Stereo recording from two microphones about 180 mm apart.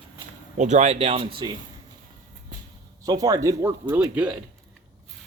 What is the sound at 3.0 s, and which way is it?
Speech, 20° right (ahead or behind).